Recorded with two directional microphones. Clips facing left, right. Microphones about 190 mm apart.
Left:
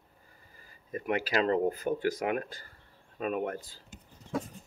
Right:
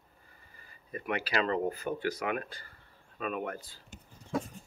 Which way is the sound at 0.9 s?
45° left (ahead or behind).